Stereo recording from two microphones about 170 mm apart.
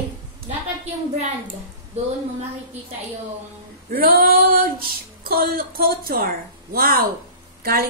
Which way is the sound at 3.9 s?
60° right (ahead or behind).